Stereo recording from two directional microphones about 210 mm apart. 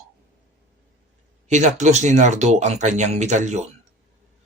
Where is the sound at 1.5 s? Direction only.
35° right (ahead or behind).